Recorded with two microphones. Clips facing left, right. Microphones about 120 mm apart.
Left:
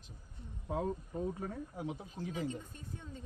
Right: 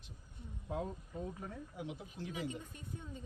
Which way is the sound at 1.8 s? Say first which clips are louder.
Left 1 dB; 35° left (ahead or behind).